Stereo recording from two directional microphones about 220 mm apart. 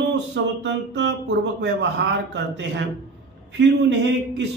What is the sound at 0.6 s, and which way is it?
Speech, 55° right (ahead or behind).